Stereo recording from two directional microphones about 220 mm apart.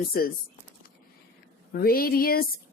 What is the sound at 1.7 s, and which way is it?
Speech, 45° left (ahead or behind).